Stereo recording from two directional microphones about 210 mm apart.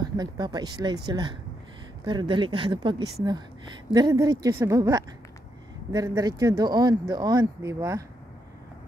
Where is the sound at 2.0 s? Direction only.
20° right (ahead or behind).